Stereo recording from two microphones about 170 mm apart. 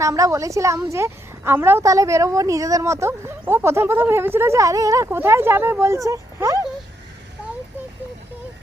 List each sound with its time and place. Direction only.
0.0 s a woman's voice: 20° right (ahead or behind)